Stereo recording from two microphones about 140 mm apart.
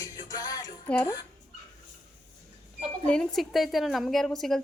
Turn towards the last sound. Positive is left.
turn(degrees=0)  # may be behind; listen again after turning